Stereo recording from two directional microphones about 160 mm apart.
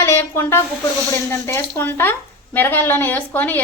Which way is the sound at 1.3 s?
15° left (ahead or behind).